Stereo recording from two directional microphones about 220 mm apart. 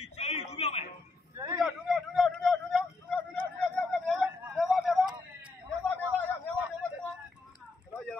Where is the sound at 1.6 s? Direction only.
Centre (ahead or behind).